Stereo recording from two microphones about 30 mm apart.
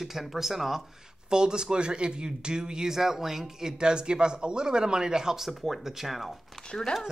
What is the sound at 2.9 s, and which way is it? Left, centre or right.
Speech, centre.